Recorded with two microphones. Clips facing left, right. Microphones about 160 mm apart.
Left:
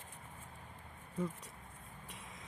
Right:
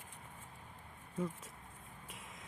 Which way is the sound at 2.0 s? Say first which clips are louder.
Even; centre (ahead or behind).